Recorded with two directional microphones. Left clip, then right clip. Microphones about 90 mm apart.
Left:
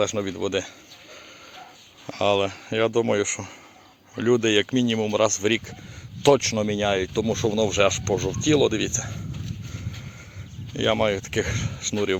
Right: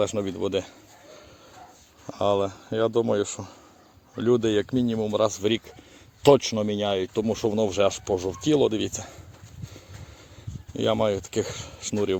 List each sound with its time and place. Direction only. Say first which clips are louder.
0.0 s speech: left 1 dB; 30° right (ahead or behind)
2.1 s speech: left 2 dB; 20° right (ahead or behind)
7.2 s speech: left 1 dB; 30° right (ahead or behind)
10.8 s speech: left 1 dB; 35° right (ahead or behind)